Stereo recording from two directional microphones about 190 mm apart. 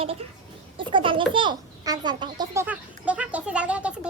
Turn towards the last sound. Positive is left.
turn(degrees=-5)  # may be behind; listen again after turning